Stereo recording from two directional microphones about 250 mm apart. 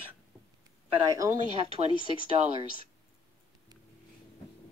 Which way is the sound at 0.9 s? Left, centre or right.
Centre.